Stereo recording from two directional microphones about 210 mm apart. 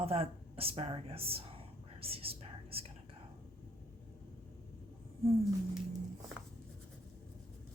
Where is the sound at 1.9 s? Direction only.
25° right (ahead or behind).